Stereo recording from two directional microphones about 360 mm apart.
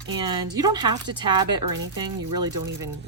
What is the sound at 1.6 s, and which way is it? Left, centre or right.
Speech, right.